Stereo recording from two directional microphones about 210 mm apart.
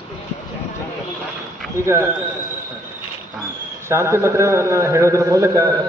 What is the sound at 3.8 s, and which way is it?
A man's voice, 10° right (ahead or behind).